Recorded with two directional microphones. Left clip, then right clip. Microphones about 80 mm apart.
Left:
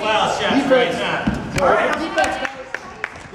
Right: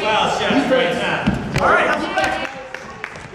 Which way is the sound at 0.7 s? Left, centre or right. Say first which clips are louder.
Left 2 dB; left.